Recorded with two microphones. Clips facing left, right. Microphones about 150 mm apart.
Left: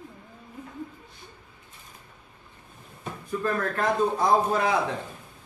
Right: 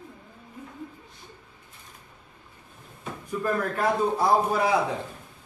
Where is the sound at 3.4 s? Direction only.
10° right (ahead or behind).